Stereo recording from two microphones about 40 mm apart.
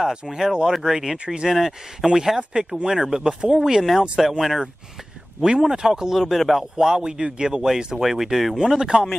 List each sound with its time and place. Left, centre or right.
0.1 s speech: centre
1.1 s a man's voice: right
1.5 s speech: centre; by 3.6 s right
3.6 s speech: centre
6.3 s speech: centre
6.8 s a man's voice: centre
7.6 s speech: centre
8.5 s speech: centre